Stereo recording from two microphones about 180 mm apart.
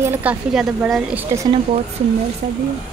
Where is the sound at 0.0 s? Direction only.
10° right (ahead or behind).